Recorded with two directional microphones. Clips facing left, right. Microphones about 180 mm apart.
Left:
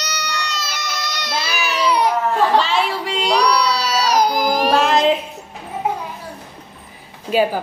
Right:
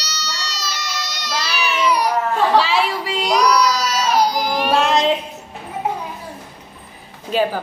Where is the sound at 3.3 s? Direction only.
30° left (ahead or behind); by 4.7 s 45° left (ahead or behind).